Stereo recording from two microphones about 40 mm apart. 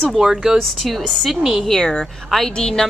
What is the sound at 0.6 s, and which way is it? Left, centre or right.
Speech, centre.